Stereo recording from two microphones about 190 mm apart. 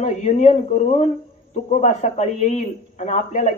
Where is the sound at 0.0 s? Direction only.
35° left (ahead or behind).